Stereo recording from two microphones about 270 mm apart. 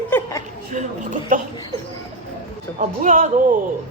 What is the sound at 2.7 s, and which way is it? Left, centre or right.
Speech, right.